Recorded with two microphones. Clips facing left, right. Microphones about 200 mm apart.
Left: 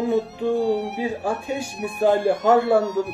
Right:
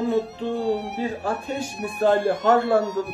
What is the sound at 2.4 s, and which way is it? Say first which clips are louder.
Speech: left 3 dB; 15° left (ahead or behind).